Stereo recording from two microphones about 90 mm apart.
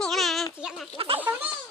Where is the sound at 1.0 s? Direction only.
90° right.